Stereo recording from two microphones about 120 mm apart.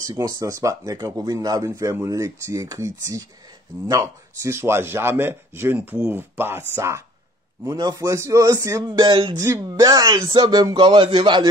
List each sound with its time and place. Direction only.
0.0 s speech: 30° right (ahead or behind)
9.4 s speech: 25° right (ahead or behind); by 11.4 s 40° right (ahead or behind)